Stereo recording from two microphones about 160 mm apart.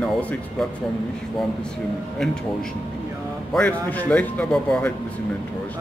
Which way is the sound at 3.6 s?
10° left (ahead or behind).